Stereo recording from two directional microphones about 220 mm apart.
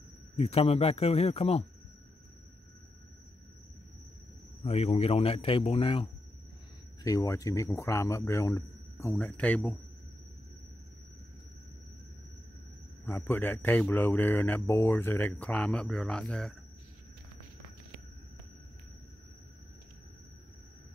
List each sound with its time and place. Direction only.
0.4 s a man's voice: 30° left (ahead or behind)
4.6 s a man's voice: 30° left (ahead or behind)
7.0 s speech: 15° left (ahead or behind)
13.0 s speech: 10° left (ahead or behind)